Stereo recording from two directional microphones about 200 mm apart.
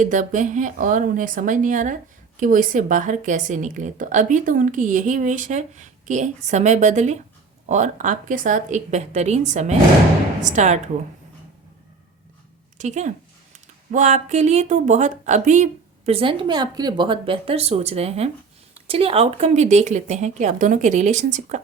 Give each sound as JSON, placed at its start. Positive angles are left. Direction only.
{"t": 0.0, "sound": "a woman's voice", "side_deg": -40}
{"t": 12.8, "sound": "a woman's voice", "side_deg": -35}